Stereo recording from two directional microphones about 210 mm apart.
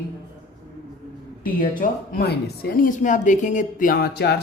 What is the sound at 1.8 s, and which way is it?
Speech, 45° left (ahead or behind).